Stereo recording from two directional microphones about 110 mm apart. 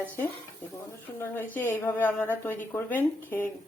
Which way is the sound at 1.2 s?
20° left (ahead or behind).